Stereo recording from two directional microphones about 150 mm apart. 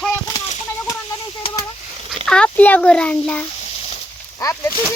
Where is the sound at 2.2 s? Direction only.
5° left (ahead or behind).